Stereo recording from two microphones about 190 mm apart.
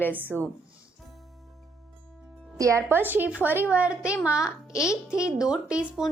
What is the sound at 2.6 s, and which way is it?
A woman's voice, 15° right (ahead or behind).